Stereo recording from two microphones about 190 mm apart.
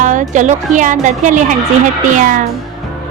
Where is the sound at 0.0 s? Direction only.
40° right (ahead or behind).